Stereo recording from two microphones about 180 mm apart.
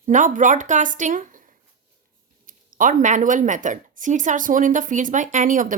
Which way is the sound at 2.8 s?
45° right (ahead or behind).